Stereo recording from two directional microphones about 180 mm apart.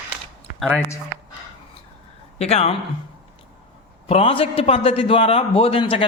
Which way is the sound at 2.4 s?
35° left (ahead or behind).